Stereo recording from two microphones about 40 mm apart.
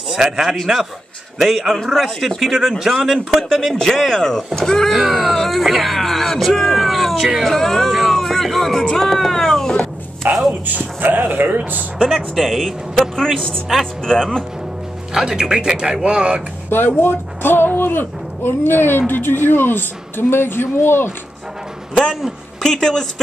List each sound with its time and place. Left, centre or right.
0.2 s a man's voice: centre
1.4 s a man's voice: centre
4.9 s speech: centre
7.4 s music: centre
10.2 s speech: right
12.0 s a man's voice: centre
14.0 s speech: centre
15.1 s speech: centre
16.7 s speech: left
22.6 s speech: centre